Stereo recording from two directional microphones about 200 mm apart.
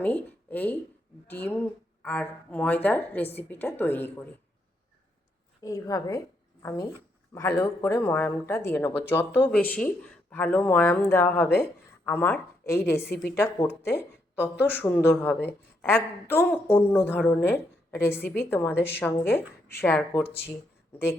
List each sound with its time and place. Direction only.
0.0 s speech: 10° left (ahead or behind)
5.6 s a woman's voice: 15° left (ahead or behind)